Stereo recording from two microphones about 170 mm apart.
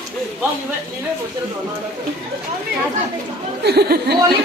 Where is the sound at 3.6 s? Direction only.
70° right (ahead or behind).